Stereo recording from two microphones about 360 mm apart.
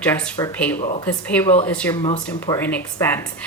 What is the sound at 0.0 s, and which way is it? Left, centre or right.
Speech, centre.